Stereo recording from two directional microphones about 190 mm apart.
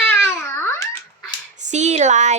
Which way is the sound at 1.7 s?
35° right (ahead or behind).